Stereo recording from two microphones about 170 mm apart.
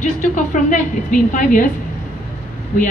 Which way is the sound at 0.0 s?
50° left (ahead or behind).